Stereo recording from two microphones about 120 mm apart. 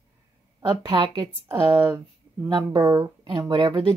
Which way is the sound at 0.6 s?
35° right (ahead or behind).